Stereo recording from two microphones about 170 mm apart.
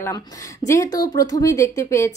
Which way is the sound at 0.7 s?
20° left (ahead or behind).